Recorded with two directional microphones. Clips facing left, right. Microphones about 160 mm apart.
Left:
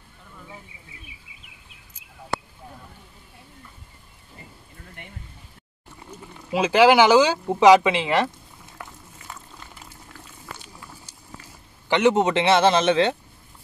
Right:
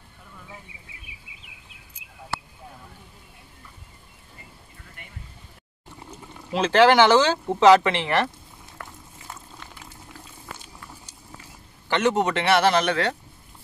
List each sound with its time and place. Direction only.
6.5 s speech: 10° left (ahead or behind)
11.9 s a man's voice: 20° left (ahead or behind)